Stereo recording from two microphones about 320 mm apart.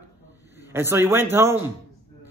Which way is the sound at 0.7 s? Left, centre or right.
Centre.